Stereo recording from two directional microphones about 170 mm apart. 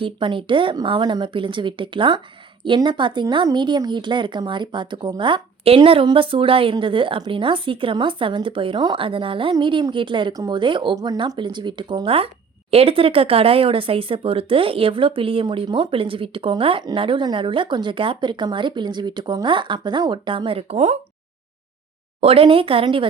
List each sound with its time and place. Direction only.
0.0 s a woman's voice: 30° right (ahead or behind)
22.2 s speech: 35° right (ahead or behind)